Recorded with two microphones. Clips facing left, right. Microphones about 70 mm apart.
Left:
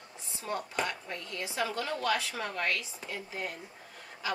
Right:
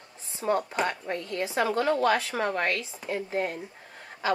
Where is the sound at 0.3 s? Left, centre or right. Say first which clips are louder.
Right 9 dB; right.